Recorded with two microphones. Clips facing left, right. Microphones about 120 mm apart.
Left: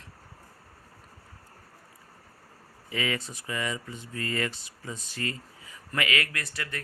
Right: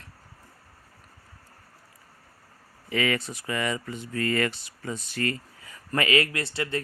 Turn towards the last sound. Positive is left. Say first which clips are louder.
# right 7 dB
turn(degrees=-30)  # may be behind; listen again after turning